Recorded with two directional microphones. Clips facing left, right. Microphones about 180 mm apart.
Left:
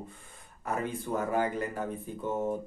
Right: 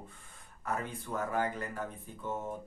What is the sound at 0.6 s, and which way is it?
Speech, 15° left (ahead or behind).